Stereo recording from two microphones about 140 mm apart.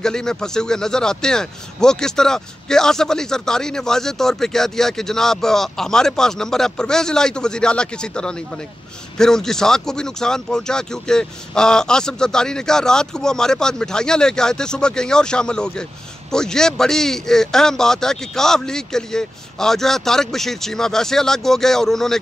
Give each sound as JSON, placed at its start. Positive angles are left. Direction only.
{"t": 0.0, "sound": "speech", "side_deg": 5}